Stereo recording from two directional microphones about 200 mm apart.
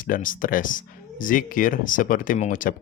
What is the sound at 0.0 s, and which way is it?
Speech, 40° left (ahead or behind).